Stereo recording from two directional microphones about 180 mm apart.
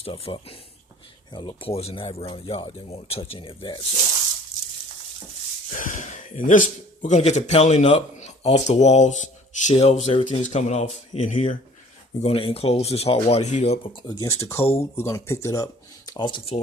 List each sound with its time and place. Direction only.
0.0 s speech: 30° left (ahead or behind)
5.7 s speech: 45° left (ahead or behind)
14.2 s speech: 15° left (ahead or behind)